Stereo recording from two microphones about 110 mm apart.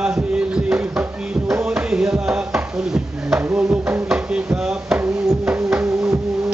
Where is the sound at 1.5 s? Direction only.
5° right (ahead or behind).